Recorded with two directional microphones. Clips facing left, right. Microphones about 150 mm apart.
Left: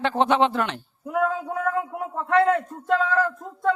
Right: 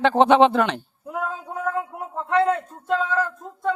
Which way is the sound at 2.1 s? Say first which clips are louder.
Left 1 dB; 25° right (ahead or behind).